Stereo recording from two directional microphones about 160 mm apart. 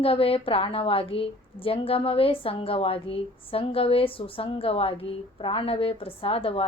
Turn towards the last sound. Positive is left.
turn(degrees=35)  # may be behind; listen again after turning